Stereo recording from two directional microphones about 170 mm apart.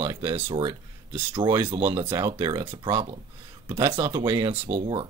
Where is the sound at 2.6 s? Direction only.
30° right (ahead or behind).